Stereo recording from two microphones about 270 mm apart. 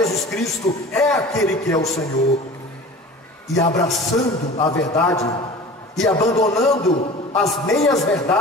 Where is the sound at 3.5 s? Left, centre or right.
Centre.